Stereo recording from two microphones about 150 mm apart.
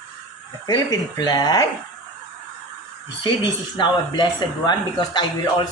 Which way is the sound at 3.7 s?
30° left (ahead or behind).